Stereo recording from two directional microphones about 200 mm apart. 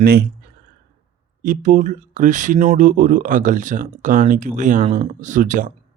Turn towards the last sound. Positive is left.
turn(degrees=-40)  # may be behind; listen again after turning